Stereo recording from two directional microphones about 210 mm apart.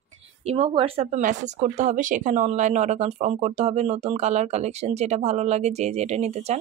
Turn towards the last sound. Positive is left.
turn(degrees=-30)  # may be behind; listen again after turning